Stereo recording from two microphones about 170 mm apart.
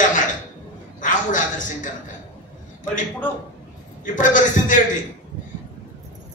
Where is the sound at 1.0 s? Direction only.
50° left (ahead or behind).